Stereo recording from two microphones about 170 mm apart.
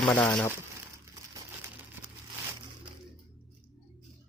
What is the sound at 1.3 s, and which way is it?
Crumpling, 20° right (ahead or behind).